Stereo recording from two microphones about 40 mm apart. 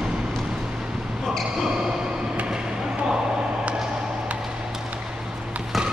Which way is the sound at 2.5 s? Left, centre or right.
Centre.